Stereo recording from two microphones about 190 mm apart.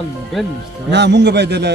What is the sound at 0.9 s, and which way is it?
Speech, 65° right (ahead or behind).